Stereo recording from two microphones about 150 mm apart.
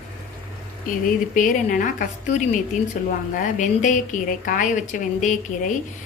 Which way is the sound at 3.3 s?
60° left (ahead or behind).